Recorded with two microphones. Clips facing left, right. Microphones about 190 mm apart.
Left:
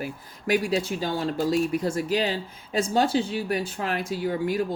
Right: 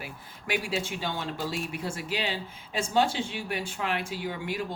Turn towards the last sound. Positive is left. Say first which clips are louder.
# left 7 dB
turn(degrees=40)  # may be behind; listen again after turning